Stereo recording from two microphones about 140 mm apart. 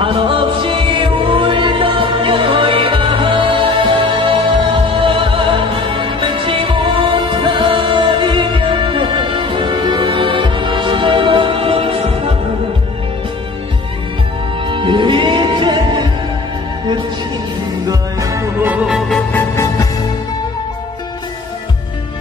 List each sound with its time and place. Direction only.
0.0 s music: 40° right (ahead or behind)
14.7 s music: 35° right (ahead or behind)
17.8 s music: 25° right (ahead or behind)
18.7 s music: 5° right (ahead or behind)
19.3 s music: 20° left (ahead or behind)